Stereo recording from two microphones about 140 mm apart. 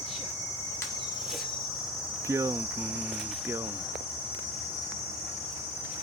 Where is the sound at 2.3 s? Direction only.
20° right (ahead or behind).